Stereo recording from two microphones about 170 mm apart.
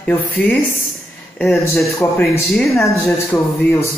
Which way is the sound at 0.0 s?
10° left (ahead or behind).